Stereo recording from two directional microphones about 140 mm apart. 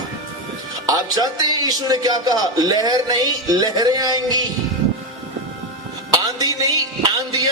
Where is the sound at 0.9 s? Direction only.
30° right (ahead or behind).